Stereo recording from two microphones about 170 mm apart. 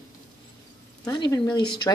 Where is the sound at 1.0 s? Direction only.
25° left (ahead or behind).